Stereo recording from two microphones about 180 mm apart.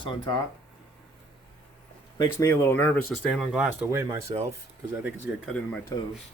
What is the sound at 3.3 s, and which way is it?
Speech, centre (ahead or behind).